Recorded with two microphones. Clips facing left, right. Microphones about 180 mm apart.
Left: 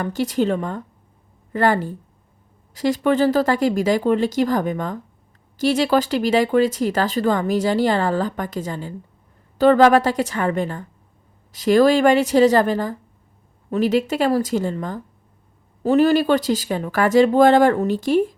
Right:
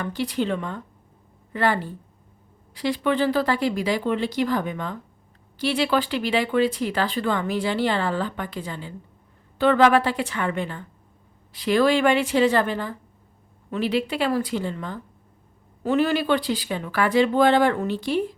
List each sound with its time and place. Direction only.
0.0 s a woman's voice: 45° left (ahead or behind)